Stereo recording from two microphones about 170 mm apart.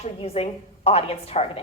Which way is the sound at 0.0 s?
35° left (ahead or behind).